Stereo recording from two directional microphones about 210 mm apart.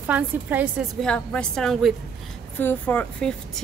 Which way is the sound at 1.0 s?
5° left (ahead or behind).